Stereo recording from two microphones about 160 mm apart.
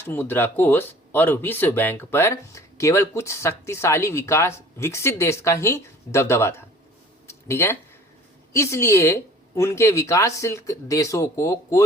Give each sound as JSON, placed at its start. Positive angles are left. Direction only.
{"t": 0.0, "sound": "speech", "side_deg": 15}
{"t": 7.3, "sound": "a sound", "side_deg": 15}
{"t": 8.5, "sound": "speech", "side_deg": 15}